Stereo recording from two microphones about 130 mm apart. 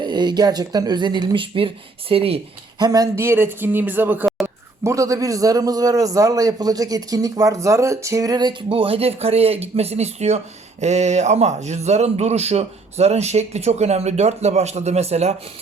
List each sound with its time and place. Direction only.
0.0 s speech: 35° right (ahead or behind)
2.7 s speech: 30° right (ahead or behind); by 15.4 s 55° right (ahead or behind)